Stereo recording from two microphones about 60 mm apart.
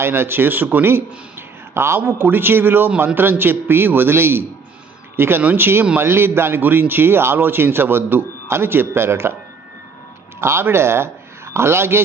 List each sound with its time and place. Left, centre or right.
0.0 s a man's voice: right
10.4 s a man's voice: right